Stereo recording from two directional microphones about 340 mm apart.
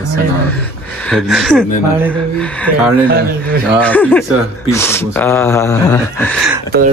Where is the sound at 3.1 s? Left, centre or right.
Right.